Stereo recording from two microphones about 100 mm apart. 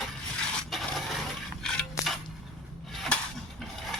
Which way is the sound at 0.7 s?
Centre (ahead or behind).